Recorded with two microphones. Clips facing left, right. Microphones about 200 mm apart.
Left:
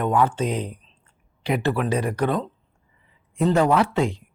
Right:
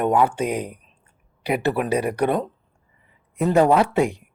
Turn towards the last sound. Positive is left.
turn(degrees=-10)  # may be behind; listen again after turning